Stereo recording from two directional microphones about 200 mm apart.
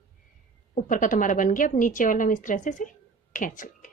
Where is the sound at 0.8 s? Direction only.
40° left (ahead or behind).